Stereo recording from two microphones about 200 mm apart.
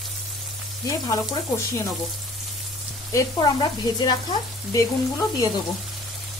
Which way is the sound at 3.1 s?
20° left (ahead or behind).